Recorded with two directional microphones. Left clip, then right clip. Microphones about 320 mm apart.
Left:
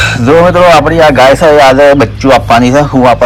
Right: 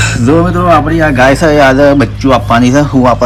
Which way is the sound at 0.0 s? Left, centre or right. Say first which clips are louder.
Left 5 dB; centre.